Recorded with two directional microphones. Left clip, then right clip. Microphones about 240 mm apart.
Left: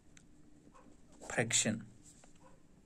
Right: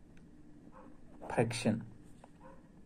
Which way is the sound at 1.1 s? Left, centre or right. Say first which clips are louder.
Even; centre.